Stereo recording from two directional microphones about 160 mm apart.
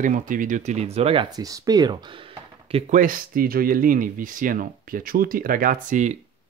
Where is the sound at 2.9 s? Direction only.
60° right (ahead or behind).